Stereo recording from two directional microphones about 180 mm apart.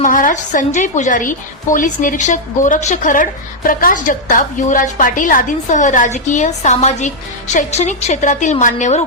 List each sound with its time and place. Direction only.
0.0 s a woman's voice: 45° left (ahead or behind)